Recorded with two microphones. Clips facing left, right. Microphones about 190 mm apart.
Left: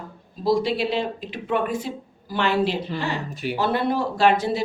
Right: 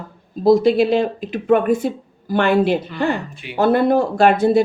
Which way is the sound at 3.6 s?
50° right (ahead or behind).